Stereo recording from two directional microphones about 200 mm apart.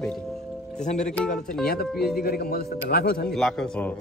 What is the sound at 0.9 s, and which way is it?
Speech, 5° left (ahead or behind).